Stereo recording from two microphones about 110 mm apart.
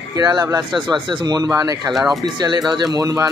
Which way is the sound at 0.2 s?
40° right (ahead or behind).